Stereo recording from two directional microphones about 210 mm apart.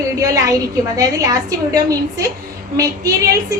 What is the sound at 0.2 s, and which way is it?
A woman's voice, 15° right (ahead or behind).